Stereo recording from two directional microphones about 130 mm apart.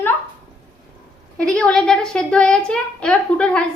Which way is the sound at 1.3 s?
5° left (ahead or behind).